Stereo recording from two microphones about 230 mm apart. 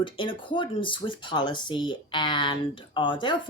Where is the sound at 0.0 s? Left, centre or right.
Left.